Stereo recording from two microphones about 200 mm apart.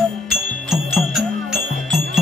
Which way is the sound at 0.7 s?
Centre (ahead or behind).